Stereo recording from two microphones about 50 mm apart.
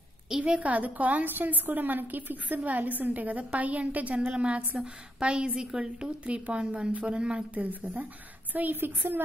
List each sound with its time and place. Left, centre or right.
0.4 s a woman's voice: right
6.0 s speech: right
7.5 s a woman's voice: right
8.7 s a woman's voice: right